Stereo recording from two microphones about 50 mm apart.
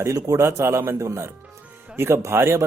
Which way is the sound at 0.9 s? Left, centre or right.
Right.